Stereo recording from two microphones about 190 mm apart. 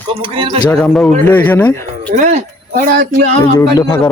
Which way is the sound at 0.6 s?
5° left (ahead or behind).